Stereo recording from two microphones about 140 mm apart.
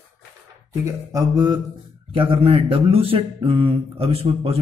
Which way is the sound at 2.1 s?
40° right (ahead or behind).